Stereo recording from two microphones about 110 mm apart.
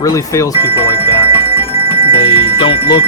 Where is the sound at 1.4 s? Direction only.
55° left (ahead or behind).